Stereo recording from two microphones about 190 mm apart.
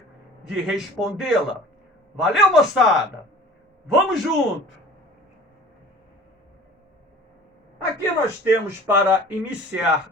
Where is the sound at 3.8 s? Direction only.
Centre (ahead or behind).